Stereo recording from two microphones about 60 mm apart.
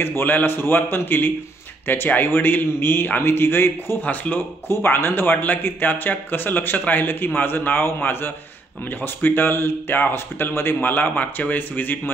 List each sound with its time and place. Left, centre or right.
0.0 s speech: left
4.0 s speech: left
4.6 s speech: left
10.8 s speech: left